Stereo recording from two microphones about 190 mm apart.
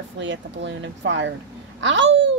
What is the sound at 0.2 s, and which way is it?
A woman's voice, 70° right (ahead or behind).